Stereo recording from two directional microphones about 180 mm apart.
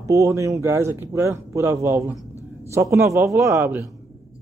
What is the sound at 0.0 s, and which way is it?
Speech, 15° right (ahead or behind).